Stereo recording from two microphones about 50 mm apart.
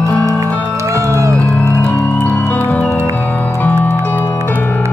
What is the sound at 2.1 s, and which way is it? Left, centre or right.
Music, left.